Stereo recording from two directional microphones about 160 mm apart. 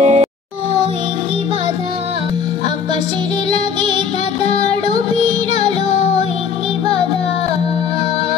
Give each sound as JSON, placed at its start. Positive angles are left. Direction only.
{"t": 0.0, "sound": "music", "side_deg": -40}
{"t": 3.5, "sound": "music", "side_deg": -30}